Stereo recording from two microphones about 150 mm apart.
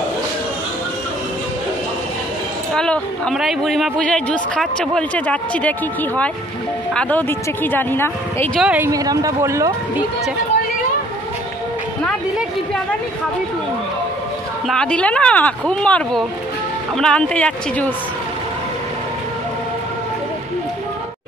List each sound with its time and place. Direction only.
2.7 s speech: 5° left (ahead or behind)
8.5 s speech: 5° right (ahead or behind)
8.8 s speech: 25° right (ahead or behind)
14.7 s speech: 5° left (ahead or behind)